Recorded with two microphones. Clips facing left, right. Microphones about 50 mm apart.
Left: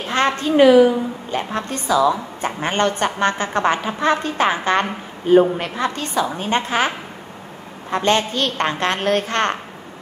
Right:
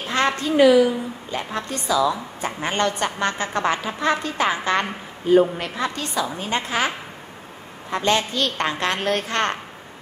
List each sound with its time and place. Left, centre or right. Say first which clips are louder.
0.1 s a woman's voice: left 3 dB; left
7.9 s a woman's voice: left 3 dB; left